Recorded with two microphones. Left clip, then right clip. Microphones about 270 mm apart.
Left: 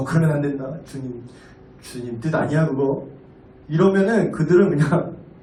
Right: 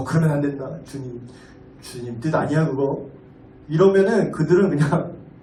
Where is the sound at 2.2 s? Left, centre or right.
Right.